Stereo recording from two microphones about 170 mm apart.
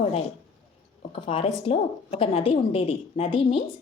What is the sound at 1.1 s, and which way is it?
A woman's voice, 30° left (ahead or behind).